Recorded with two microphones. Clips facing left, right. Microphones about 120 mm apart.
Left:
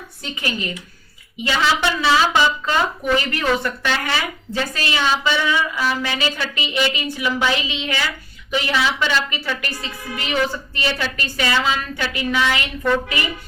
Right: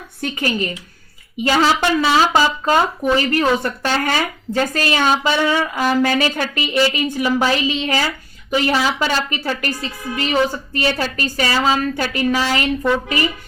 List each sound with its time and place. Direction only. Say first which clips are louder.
0.2 s a woman's voice: right 6 dB; 50° right (ahead or behind)